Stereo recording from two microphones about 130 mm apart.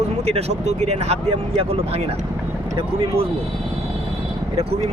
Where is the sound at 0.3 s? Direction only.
55° right (ahead or behind).